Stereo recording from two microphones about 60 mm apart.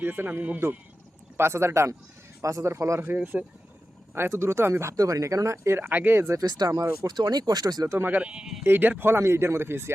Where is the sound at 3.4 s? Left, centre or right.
Right.